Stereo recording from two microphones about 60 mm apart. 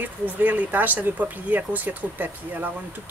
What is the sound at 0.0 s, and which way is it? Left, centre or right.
Speech, right.